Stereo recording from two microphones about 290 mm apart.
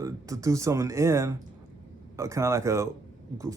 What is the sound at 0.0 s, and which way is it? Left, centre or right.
Speech, centre.